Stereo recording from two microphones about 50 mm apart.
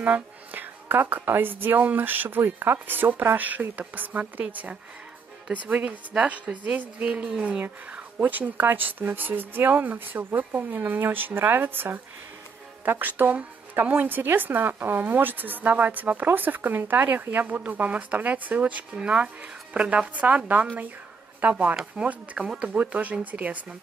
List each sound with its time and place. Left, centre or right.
0.0 s speech: right
8.2 s speech: right